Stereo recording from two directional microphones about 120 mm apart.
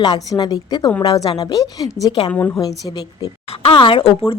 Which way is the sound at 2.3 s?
15° left (ahead or behind).